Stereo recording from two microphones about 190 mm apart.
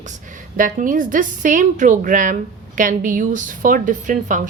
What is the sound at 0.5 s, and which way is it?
A woman's voice, 45° right (ahead or behind).